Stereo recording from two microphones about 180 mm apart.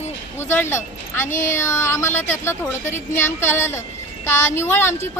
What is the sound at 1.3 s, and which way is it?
Speech, 45° left (ahead or behind).